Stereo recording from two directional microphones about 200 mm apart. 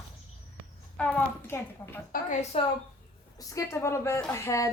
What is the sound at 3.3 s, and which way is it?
A woman's voice, 15° left (ahead or behind).